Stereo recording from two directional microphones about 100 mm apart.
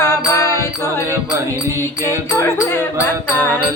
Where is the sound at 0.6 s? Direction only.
25° left (ahead or behind).